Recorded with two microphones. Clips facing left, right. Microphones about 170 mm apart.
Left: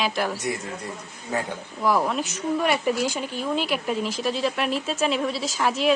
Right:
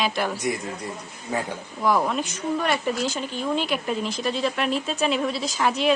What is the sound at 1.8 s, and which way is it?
Speech, centre (ahead or behind).